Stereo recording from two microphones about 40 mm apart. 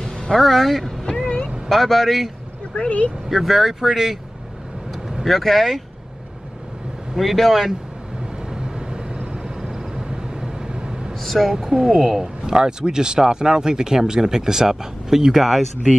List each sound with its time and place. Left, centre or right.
0.3 s speech: centre
2.7 s speech: left
3.3 s speech: centre
5.2 s speech: centre
7.2 s speech: centre
8.5 s vehicle: centre
11.2 s speech: centre
12.4 s speech: centre